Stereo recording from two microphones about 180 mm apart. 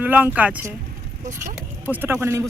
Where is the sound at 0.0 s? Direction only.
10° right (ahead or behind).